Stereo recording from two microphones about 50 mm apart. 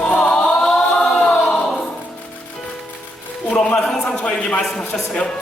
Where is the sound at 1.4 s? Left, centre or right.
Left.